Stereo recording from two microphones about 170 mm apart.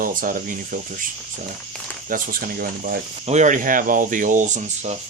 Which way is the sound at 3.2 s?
45° right (ahead or behind).